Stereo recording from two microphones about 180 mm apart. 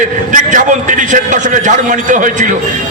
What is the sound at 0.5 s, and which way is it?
A man's voice, 45° right (ahead or behind).